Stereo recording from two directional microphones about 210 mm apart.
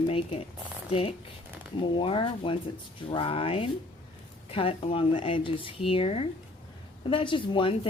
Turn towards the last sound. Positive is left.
turn(degrees=25)  # may be behind; listen again after turning